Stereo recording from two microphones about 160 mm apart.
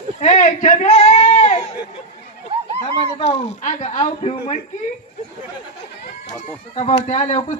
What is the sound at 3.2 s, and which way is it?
Speech, 45° left (ahead or behind).